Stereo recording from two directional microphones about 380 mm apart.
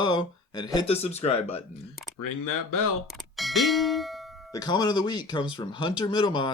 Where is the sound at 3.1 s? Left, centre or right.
Centre.